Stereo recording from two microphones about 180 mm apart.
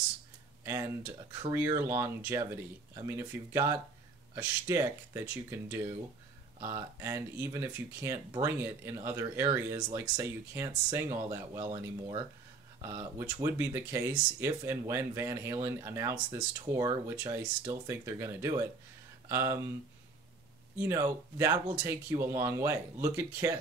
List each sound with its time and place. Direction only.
0.7 s speech: 15° right (ahead or behind)
21.4 s speech: 15° right (ahead or behind)